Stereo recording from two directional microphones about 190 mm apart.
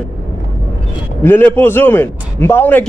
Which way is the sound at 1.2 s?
10° left (ahead or behind).